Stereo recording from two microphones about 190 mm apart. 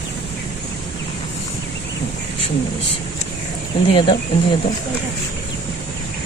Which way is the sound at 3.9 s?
25° left (ahead or behind).